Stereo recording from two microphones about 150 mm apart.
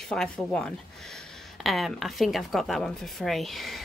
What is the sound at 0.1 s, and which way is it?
A woman's voice, 5° left (ahead or behind).